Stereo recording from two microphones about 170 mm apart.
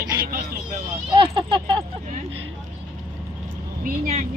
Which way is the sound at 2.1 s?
40° right (ahead or behind).